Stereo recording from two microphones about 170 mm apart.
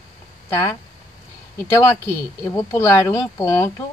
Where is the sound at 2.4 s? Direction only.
20° left (ahead or behind).